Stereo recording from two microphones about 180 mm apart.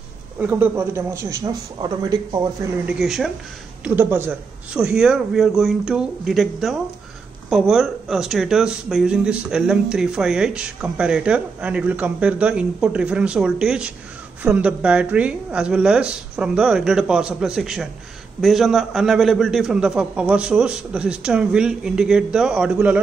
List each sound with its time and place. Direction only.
0.4 s a man's voice: 10° right (ahead or behind)
2.9 s speech: centre (ahead or behind)